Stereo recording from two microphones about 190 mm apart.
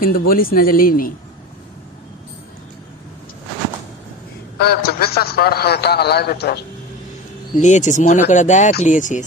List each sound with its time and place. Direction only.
0.0 s speech: 50° left (ahead or behind)
4.6 s a man's voice: 55° left (ahead or behind)
7.6 s speech: 40° left (ahead or behind)